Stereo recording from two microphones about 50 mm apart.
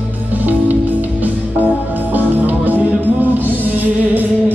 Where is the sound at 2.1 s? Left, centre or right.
Right.